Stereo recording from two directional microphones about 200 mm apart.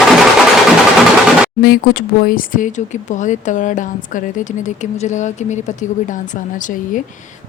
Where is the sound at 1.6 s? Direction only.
50° left (ahead or behind).